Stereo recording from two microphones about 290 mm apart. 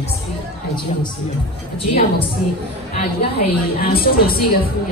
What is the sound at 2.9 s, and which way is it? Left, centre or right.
A woman's voice, left.